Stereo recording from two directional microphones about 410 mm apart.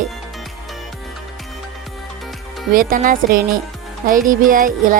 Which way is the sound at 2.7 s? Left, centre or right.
Centre.